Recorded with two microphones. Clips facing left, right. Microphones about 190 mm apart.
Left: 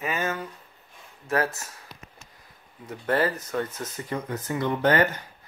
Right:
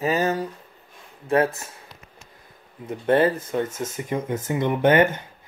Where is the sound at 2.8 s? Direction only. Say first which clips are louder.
Right 6 dB; 25° right (ahead or behind).